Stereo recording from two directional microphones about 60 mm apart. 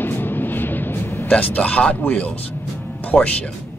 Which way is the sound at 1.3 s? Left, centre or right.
Left.